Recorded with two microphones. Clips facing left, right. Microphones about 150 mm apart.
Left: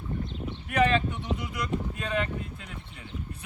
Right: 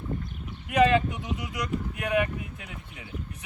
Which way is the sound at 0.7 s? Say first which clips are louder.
Right 3 dB; 15° right (ahead or behind).